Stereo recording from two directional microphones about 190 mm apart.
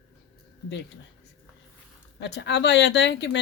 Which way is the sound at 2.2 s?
65° left (ahead or behind).